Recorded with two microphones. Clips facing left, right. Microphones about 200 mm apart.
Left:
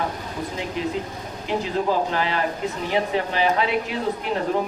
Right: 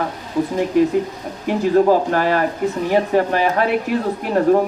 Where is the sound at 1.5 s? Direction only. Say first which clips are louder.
Right 9 dB; 50° right (ahead or behind).